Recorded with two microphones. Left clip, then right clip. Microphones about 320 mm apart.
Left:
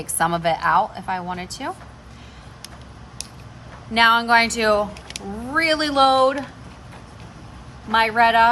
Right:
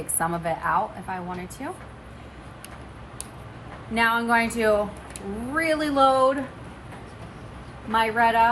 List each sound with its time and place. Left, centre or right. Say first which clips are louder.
0.4 s speech: left 6 dB; left
3.9 s speech: left 6 dB; centre
7.9 s speech: left 4 dB; left